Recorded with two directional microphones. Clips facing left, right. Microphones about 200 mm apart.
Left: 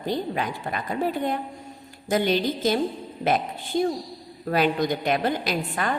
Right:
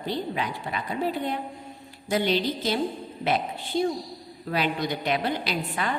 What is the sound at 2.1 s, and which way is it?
A woman's voice, 50° left (ahead or behind).